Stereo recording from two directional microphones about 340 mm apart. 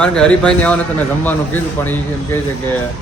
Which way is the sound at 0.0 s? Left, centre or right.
Centre.